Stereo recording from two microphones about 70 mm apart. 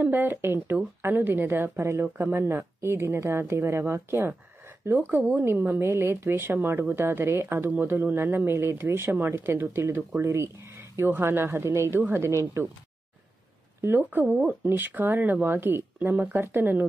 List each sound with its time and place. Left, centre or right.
0.0 s speech: right
13.7 s speech: right